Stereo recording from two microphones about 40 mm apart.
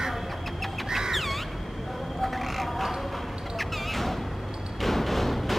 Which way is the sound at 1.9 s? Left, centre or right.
Centre.